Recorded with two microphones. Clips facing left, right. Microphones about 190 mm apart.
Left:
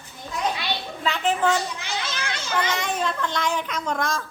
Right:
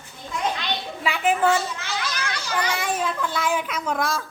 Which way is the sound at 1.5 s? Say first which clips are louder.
Right 1 dB; 15° left (ahead or behind).